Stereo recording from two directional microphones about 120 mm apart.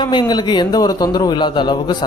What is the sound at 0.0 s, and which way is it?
Speech, 40° left (ahead or behind).